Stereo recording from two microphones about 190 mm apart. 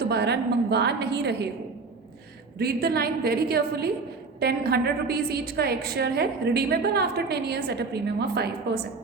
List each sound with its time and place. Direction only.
0.0 s a woman's voice: 60° right (ahead or behind)
2.6 s a woman's voice: 55° right (ahead or behind)